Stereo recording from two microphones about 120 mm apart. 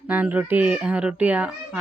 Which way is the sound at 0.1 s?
10° right (ahead or behind).